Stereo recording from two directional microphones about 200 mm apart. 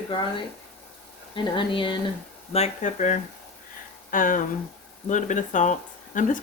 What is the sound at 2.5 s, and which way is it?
Speech, 35° left (ahead or behind).